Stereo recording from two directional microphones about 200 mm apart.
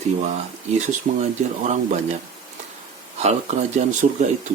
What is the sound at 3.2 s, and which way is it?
Speech, 35° right (ahead or behind).